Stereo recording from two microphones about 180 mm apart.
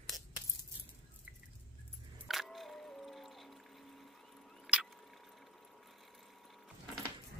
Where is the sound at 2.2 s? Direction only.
Centre (ahead or behind).